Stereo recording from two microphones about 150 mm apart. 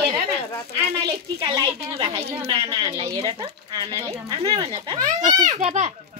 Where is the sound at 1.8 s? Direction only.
40° right (ahead or behind).